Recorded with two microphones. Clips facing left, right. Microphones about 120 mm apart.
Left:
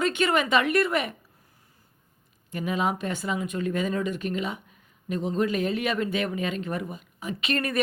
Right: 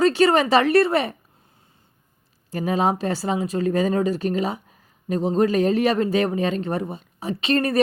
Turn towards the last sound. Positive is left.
turn(degrees=-30)  # may be behind; listen again after turning